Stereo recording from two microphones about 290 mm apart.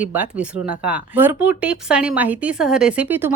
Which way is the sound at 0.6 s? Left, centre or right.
Right.